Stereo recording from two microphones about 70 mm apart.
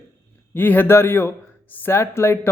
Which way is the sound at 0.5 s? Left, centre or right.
Left.